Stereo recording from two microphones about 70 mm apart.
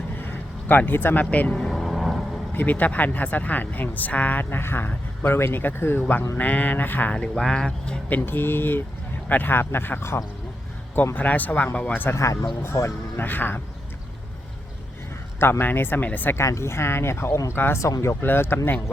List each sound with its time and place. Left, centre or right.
0.7 s speech: left
1.5 s vehicle: centre
2.5 s speech: left
4.4 s speech: left
7.1 s speech: centre
8.2 s speech: left
12.1 s speech: left
13.1 s speech: left
15.4 s speech: left
16.3 s speech: left